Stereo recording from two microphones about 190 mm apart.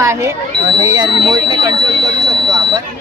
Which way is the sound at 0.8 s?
20° right (ahead or behind).